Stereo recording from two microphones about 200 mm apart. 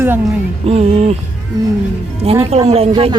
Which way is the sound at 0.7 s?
30° right (ahead or behind).